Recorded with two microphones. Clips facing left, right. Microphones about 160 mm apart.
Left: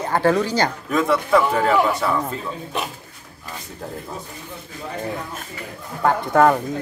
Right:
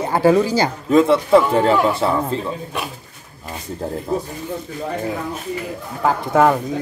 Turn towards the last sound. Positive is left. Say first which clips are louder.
# right 1 dB
turn(degrees=-5)  # may be behind; listen again after turning